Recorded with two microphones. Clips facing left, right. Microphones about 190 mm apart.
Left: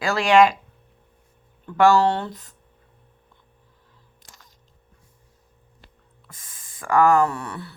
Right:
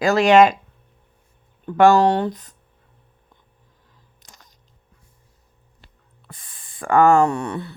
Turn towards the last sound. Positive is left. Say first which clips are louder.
# right 6 dB
turn(degrees=-25)  # may be behind; listen again after turning